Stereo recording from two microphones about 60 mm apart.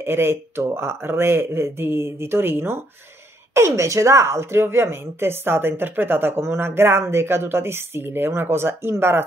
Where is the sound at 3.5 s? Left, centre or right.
Right.